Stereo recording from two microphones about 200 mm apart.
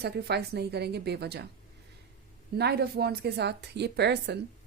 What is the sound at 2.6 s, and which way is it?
A woman's voice, 55° right (ahead or behind).